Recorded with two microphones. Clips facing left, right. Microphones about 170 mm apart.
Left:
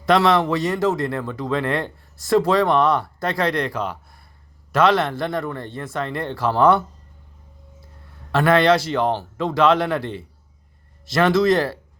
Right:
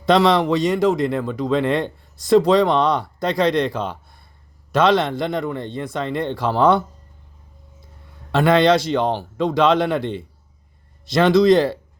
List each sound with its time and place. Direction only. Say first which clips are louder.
0.0 s speech: right 1 dB; 20° right (ahead or behind)
8.3 s speech: right 1 dB; 20° right (ahead or behind)